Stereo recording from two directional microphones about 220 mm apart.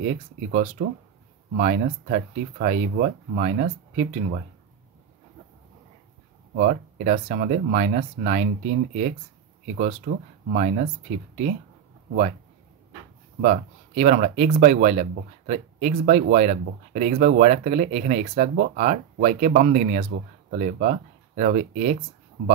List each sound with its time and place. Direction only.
0.1 s speech: 35° right (ahead or behind)
6.5 s speech: 40° right (ahead or behind)
13.4 s speech: 35° right (ahead or behind)